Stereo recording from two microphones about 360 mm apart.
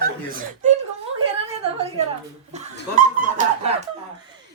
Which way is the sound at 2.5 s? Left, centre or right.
Right.